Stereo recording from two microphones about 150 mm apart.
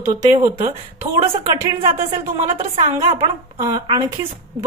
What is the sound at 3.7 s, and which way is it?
Speech, 25° right (ahead or behind).